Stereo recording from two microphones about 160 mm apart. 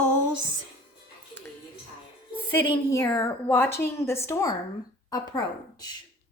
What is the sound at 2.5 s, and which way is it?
A woman's voice, 15° left (ahead or behind).